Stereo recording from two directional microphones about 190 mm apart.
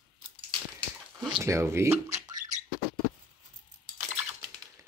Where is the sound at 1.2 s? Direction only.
20° right (ahead or behind).